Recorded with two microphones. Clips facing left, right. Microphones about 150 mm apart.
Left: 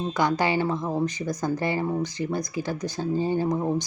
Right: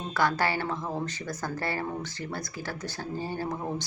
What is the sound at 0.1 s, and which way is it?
Speech, 15° left (ahead or behind).